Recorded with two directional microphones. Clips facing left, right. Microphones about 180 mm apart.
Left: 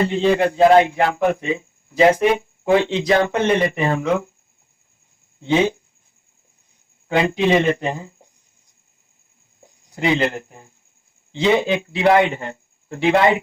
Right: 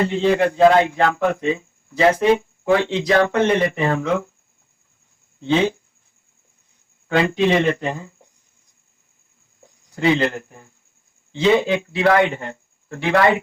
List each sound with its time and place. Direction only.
0.1 s speech: 20° left (ahead or behind)
5.4 s speech: 15° left (ahead or behind)
7.1 s speech: 20° left (ahead or behind)
9.9 s speech: 20° left (ahead or behind)